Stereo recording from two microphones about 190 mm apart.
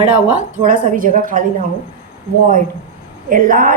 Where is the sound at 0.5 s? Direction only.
45° right (ahead or behind).